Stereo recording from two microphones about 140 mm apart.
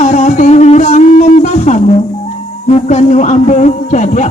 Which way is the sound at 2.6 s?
55° left (ahead or behind).